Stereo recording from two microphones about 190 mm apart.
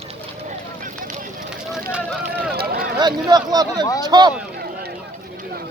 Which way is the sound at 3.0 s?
20° right (ahead or behind).